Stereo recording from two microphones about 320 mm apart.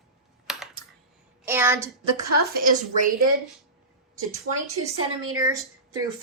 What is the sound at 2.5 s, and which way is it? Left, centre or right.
Speech, right.